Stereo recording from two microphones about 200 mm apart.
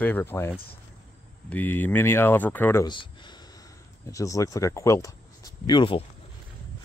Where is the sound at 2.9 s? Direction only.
25° left (ahead or behind).